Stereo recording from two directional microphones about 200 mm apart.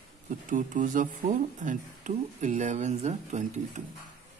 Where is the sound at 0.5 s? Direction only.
40° right (ahead or behind).